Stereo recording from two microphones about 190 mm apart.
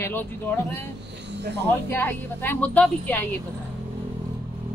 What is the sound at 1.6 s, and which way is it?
A woman's voice, 10° left (ahead or behind).